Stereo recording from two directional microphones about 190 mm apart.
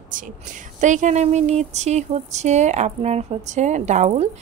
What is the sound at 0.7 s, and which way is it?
A woman's voice, 40° right (ahead or behind).